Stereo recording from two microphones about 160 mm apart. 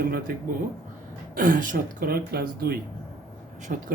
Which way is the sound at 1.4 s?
60° right (ahead or behind).